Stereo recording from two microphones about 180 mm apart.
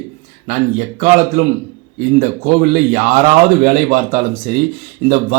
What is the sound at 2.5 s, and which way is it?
Speech, 55° right (ahead or behind).